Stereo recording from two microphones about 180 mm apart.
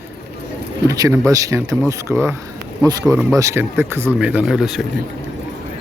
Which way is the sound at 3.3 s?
15° right (ahead or behind).